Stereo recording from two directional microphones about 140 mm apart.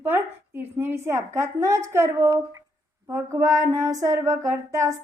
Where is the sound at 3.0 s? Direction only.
20° right (ahead or behind).